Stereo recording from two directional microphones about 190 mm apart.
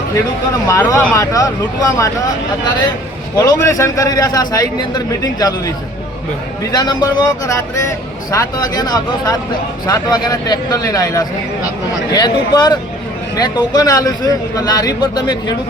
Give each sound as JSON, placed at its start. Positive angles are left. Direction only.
{"t": 0.7, "sound": "a man's voice", "side_deg": 15}
{"t": 3.3, "sound": "a man's voice", "side_deg": 20}